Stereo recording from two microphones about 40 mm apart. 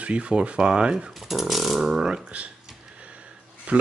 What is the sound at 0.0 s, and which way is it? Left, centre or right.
Speech, right.